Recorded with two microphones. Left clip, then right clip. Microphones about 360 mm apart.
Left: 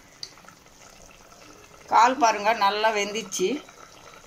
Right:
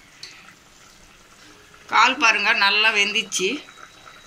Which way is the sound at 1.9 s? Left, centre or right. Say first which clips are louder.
Right 2 dB; centre.